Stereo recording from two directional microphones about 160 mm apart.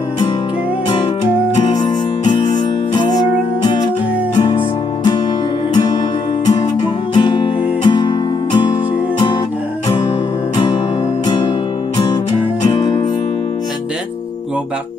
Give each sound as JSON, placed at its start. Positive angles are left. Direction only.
{"t": 0.8, "sound": "music", "side_deg": 30}
{"t": 2.2, "sound": "music", "side_deg": 30}
{"t": 4.4, "sound": "music", "side_deg": 30}
{"t": 6.6, "sound": "music", "side_deg": 30}
{"t": 10.5, "sound": "music", "side_deg": 30}
{"t": 12.7, "sound": "music", "side_deg": 30}